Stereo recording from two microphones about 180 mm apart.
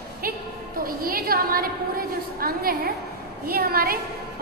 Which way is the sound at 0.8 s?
55° right (ahead or behind).